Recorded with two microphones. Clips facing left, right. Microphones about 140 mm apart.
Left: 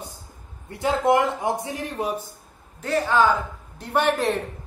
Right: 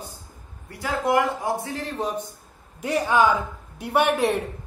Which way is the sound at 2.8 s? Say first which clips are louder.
Even; 15° right (ahead or behind).